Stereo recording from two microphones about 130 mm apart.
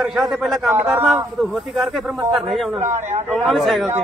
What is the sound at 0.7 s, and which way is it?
A man's voice, 10° right (ahead or behind).